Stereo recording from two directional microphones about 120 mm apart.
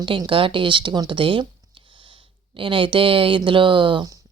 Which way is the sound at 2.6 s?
45° right (ahead or behind).